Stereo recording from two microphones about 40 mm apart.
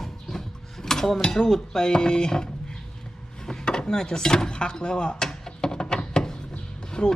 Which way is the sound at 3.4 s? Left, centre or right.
Centre.